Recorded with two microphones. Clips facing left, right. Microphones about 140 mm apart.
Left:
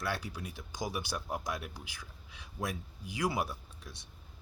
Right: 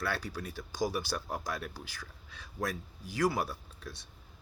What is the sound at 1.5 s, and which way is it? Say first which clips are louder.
Speech: right 1 dB; 15° left (ahead or behind).